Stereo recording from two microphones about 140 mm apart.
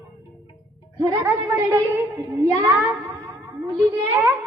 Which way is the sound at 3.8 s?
15° right (ahead or behind).